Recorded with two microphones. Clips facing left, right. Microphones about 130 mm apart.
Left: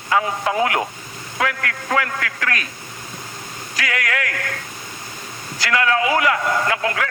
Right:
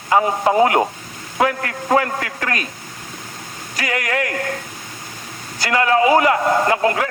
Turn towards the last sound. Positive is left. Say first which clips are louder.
# right 4 dB
turn(degrees=-30)  # may be behind; listen again after turning